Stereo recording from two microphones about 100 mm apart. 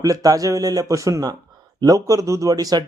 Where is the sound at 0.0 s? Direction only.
35° right (ahead or behind).